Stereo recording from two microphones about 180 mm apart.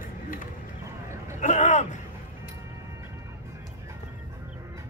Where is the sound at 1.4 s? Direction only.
40° left (ahead or behind).